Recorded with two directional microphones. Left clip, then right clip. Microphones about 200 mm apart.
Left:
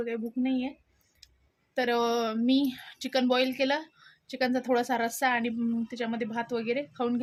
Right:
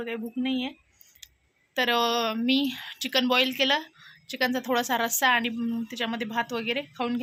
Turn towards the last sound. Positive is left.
turn(degrees=5)  # may be behind; listen again after turning